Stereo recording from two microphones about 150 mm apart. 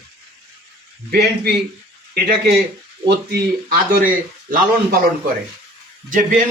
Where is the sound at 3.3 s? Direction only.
75° right (ahead or behind).